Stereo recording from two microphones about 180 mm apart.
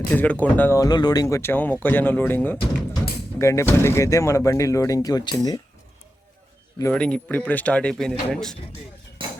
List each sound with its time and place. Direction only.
0.1 s speech: 10° left (ahead or behind)
6.9 s speech: 5° left (ahead or behind)
9.2 s a sound: 25° right (ahead or behind)